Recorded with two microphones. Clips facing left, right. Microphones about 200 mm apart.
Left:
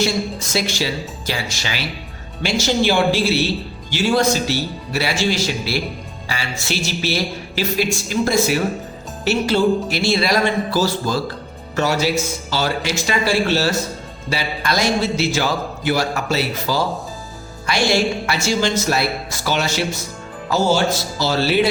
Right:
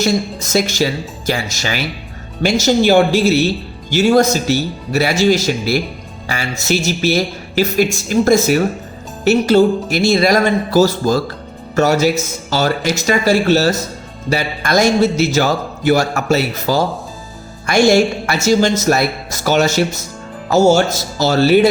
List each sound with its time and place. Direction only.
0.0 s a man's voice: 45° right (ahead or behind)